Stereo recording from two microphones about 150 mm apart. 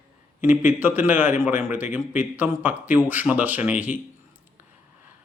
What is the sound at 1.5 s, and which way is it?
Speech, 55° left (ahead or behind).